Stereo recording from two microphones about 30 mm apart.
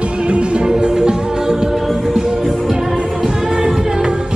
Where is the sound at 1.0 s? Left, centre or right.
Right.